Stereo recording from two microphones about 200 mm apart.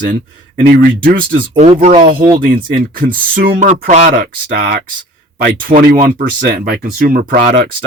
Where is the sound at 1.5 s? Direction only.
25° right (ahead or behind).